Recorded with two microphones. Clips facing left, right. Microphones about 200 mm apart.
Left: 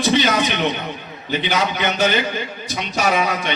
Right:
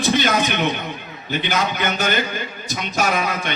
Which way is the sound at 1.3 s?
50° right (ahead or behind).